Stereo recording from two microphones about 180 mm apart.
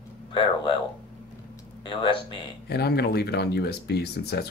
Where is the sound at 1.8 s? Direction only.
25° left (ahead or behind).